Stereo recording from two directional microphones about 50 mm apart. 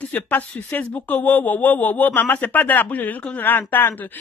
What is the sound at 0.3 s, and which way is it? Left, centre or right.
Speech, left.